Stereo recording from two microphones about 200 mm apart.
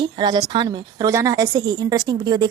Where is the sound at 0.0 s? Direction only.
20° right (ahead or behind).